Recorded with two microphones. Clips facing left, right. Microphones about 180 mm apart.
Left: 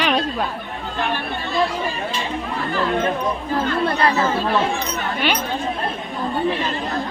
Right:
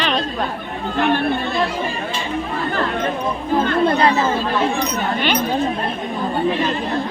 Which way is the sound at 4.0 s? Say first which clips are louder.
Right 3 dB; 20° right (ahead or behind).